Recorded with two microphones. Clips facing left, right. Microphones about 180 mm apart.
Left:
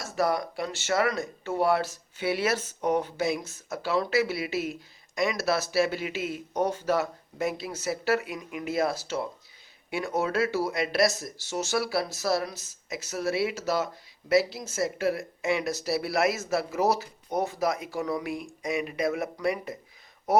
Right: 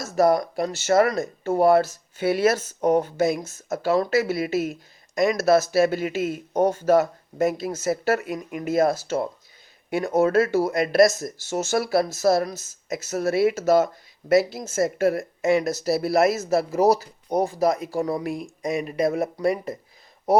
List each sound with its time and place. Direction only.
0.0 s speech: 40° right (ahead or behind)